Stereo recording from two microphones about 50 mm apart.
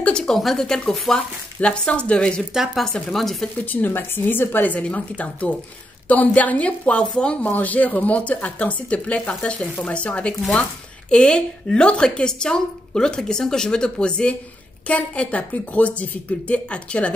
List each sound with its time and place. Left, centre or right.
0.1 s a sound: centre
0.4 s speech: centre
1.6 s a woman's voice: left
2.5 s speech: centre
3.1 s speech: centre
3.6 s a woman's voice: left
4.7 s a woman's voice: left
7.4 s a woman's voice: left